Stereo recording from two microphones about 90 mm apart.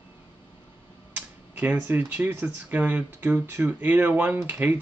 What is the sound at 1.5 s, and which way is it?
Speech, 20° right (ahead or behind).